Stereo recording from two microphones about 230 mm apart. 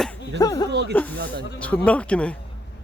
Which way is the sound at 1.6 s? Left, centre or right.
Centre.